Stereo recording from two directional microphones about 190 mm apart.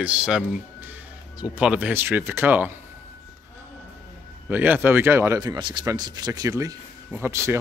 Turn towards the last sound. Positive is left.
turn(degrees=-15)  # may be behind; listen again after turning